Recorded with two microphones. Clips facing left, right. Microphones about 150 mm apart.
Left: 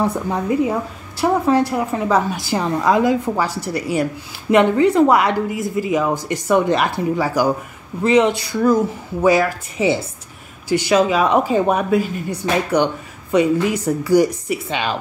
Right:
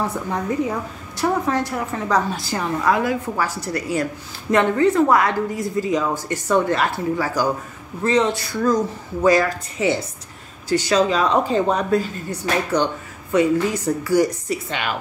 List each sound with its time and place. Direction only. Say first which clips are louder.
0.3 s a woman's voice: left 4 dB; 10° left (ahead or behind)